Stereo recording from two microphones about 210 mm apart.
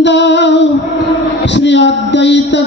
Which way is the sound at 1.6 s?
55° left (ahead or behind).